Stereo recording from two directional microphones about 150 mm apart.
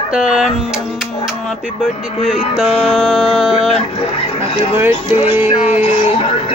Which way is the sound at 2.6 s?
Centre (ahead or behind).